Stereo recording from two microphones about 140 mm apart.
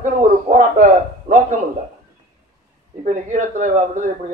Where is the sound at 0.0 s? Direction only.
65° right (ahead or behind).